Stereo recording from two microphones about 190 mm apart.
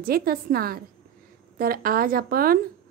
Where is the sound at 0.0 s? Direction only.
50° right (ahead or behind).